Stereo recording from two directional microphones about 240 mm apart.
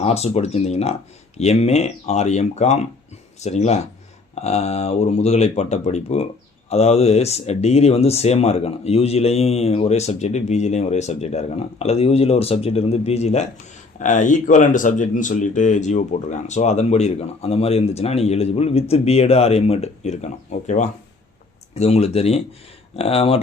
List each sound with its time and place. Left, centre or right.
0.0 s speech: left